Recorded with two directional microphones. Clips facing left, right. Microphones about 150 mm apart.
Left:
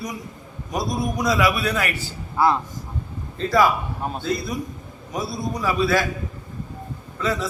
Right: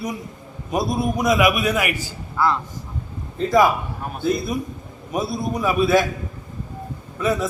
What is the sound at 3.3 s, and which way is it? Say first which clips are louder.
Speech: right 2 dB; 20° right (ahead or behind).